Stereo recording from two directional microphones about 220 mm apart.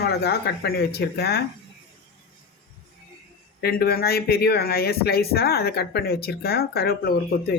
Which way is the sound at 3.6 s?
45° left (ahead or behind).